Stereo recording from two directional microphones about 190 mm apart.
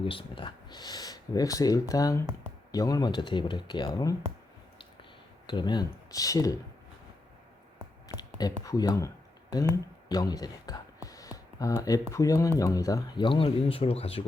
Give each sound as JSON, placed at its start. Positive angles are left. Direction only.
{"t": 0.0, "sound": "speech", "side_deg": 30}
{"t": 5.5, "sound": "speech", "side_deg": 25}
{"t": 8.0, "sound": "a sound", "side_deg": 20}
{"t": 12.1, "sound": "speech", "side_deg": 15}